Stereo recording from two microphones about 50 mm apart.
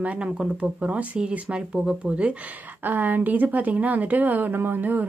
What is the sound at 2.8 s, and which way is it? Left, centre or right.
Speech, right.